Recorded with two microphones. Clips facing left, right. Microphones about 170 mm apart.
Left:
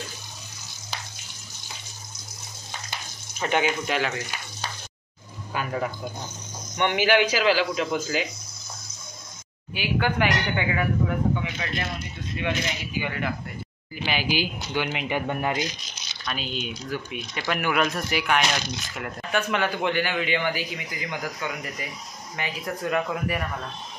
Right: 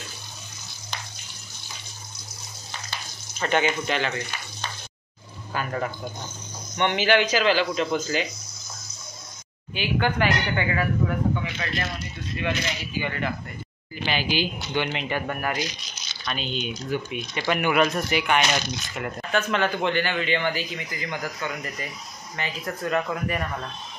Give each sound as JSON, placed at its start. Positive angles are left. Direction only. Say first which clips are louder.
{"t": 3.3, "sound": "a man's voice", "louder": "right 1 dB", "side_deg": 10}
{"t": 5.5, "sound": "a sound", "louder": "even", "side_deg": 10}
{"t": 6.8, "sound": "a man's voice", "louder": "even", "side_deg": 10}
{"t": 9.8, "sound": "a man's voice", "louder": "even", "side_deg": 10}
{"t": 16.3, "sound": "speech", "louder": "right 2 dB", "side_deg": 5}
{"t": 19.3, "sound": "a man's voice", "louder": "right 1 dB", "side_deg": 10}